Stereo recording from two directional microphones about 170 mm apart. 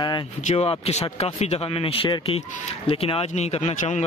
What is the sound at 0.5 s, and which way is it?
Speech, 40° left (ahead or behind).